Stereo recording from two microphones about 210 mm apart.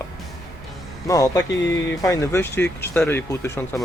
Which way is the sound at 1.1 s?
15° left (ahead or behind).